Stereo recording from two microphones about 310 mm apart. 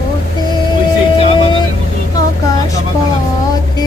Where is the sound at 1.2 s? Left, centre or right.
Centre.